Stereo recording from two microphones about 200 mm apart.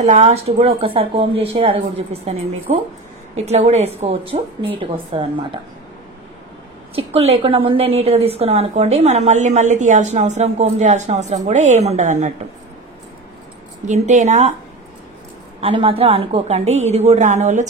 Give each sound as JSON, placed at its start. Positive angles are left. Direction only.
{"t": 0.0, "sound": "a woman's voice", "side_deg": -35}
{"t": 7.0, "sound": "a woman's voice", "side_deg": -30}
{"t": 13.8, "sound": "a woman's voice", "side_deg": -35}
{"t": 15.6, "sound": "a woman's voice", "side_deg": -25}